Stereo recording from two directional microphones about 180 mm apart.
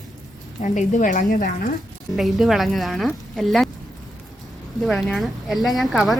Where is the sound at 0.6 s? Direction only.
45° left (ahead or behind).